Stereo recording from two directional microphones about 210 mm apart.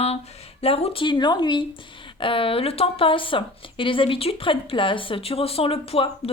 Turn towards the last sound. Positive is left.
turn(degrees=25)  # may be behind; listen again after turning